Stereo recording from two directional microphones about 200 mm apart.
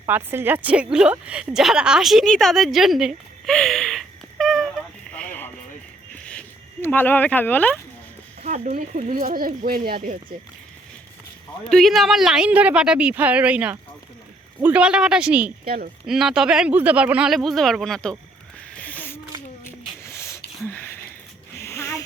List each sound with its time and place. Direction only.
0.1 s a woman's voice: 10° right (ahead or behind)
5.1 s a sound: 5° left (ahead or behind)
6.8 s speech: 10° left (ahead or behind)
8.4 s speech: 35° right (ahead or behind)
11.7 s a woman's voice: centre (ahead or behind)
15.6 s speech: 50° right (ahead or behind)
16.0 s a woman's voice: centre (ahead or behind)
18.7 s a sound: 5° left (ahead or behind)